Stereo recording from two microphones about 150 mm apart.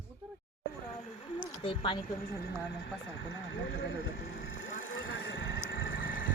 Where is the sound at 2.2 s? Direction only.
90° left.